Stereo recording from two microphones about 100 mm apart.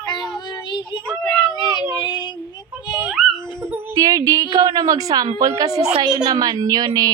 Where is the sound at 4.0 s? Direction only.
40° right (ahead or behind).